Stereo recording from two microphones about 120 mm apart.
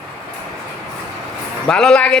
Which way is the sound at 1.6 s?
5° left (ahead or behind).